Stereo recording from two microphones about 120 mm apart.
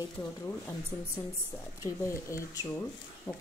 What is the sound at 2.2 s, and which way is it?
Speech, 25° left (ahead or behind).